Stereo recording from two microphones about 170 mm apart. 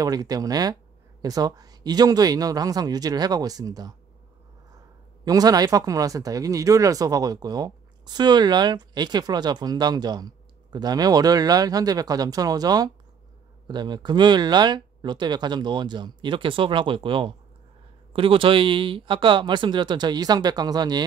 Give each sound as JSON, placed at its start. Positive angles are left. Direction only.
{"t": 0.0, "sound": "speech", "side_deg": -20}
{"t": 5.2, "sound": "speech", "side_deg": -20}